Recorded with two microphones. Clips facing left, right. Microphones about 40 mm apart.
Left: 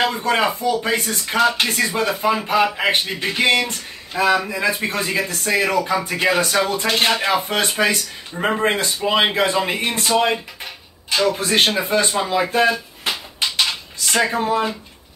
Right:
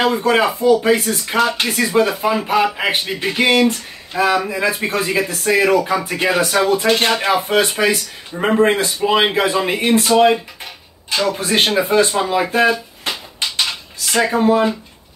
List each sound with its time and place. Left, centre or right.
0.0 s speech: centre
13.0 s dishes: centre